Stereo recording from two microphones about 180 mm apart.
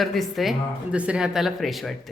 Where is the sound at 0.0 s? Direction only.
Centre (ahead or behind).